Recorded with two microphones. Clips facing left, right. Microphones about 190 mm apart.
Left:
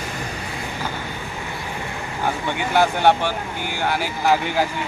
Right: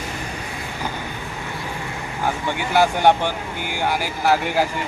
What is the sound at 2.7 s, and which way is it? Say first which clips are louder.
Speech: right 1 dB; 10° right (ahead or behind).